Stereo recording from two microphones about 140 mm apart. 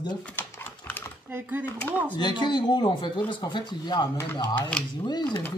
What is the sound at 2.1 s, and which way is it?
Speech, 30° left (ahead or behind).